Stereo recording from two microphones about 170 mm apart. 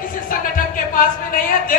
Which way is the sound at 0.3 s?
55° left (ahead or behind).